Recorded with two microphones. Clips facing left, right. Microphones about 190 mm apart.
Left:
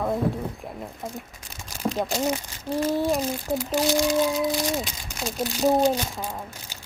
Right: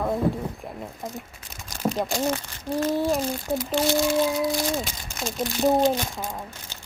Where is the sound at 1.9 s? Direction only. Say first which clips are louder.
Even; 5° left (ahead or behind).